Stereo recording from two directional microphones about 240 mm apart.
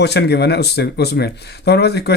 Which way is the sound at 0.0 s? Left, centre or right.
Left.